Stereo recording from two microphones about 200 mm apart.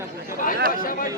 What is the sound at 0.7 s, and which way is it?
Chatter, 45° left (ahead or behind).